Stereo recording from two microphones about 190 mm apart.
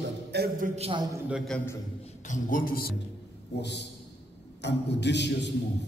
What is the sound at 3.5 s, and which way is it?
A man's voice, 65° left (ahead or behind).